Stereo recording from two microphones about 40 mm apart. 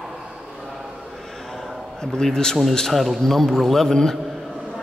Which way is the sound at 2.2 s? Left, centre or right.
Centre.